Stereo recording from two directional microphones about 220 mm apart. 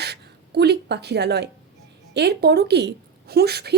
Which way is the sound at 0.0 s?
50° right (ahead or behind).